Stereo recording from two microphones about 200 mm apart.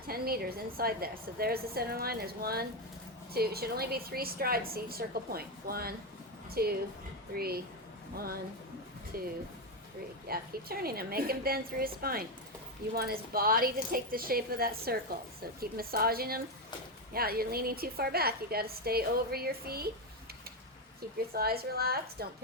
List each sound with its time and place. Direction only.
0.1 s a woman's voice: 50° right (ahead or behind)
9.1 s a woman's voice: 45° right (ahead or behind)
21.3 s a woman's voice: 50° right (ahead or behind)